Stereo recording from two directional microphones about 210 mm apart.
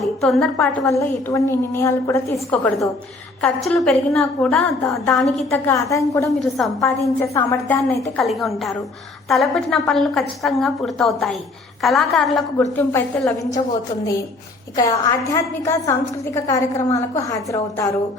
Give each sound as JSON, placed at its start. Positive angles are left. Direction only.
{"t": 0.0, "sound": "a sound", "side_deg": 0}
{"t": 0.8, "sound": "a woman's voice", "side_deg": 15}
{"t": 12.7, "sound": "a woman's voice", "side_deg": 10}
{"t": 14.8, "sound": "a woman's voice", "side_deg": 15}